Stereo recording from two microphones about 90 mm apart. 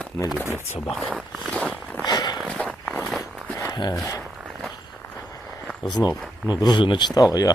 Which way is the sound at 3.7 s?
55° left (ahead or behind).